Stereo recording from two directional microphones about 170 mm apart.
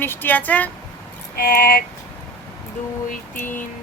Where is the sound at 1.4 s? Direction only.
60° left (ahead or behind).